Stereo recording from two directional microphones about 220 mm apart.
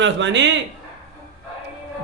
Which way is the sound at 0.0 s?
55° right (ahead or behind).